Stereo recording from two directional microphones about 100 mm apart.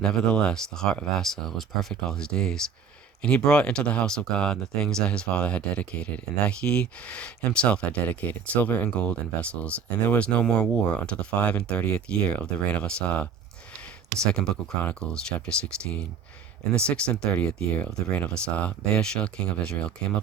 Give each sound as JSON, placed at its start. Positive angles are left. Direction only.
{"t": 0.0, "sound": "speech", "side_deg": 10}
{"t": 14.3, "sound": "speech", "side_deg": 5}
{"t": 16.9, "sound": "speech", "side_deg": 10}